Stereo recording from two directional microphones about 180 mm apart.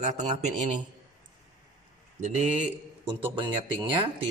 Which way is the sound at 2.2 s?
45° right (ahead or behind).